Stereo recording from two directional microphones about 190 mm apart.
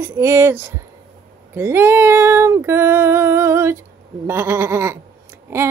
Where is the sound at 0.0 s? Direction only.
15° right (ahead or behind).